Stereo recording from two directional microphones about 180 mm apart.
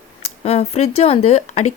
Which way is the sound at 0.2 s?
35° left (ahead or behind).